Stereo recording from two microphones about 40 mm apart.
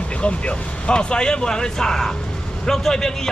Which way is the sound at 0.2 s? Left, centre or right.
Left.